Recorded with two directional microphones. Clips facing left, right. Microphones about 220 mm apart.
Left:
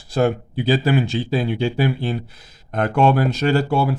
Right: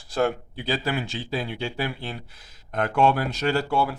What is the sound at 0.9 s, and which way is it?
Speech, 20° left (ahead or behind).